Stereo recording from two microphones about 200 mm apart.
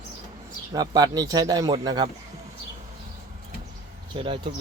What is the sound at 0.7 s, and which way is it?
A man's voice, 20° right (ahead or behind).